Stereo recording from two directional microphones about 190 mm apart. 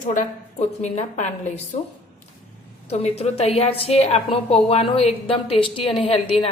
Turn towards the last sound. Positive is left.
turn(degrees=30)  # may be behind; listen again after turning